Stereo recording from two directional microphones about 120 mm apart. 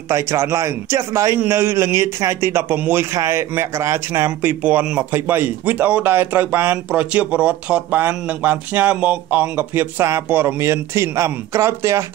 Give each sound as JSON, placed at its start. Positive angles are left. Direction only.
{"t": 0.1, "sound": "a man's voice", "side_deg": -20}